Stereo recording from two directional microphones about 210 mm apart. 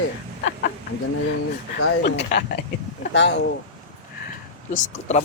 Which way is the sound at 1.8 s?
55° left (ahead or behind).